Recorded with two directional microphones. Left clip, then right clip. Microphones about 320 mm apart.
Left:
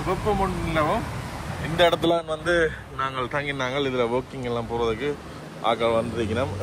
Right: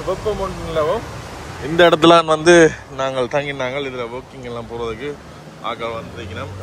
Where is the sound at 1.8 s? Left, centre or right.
Right.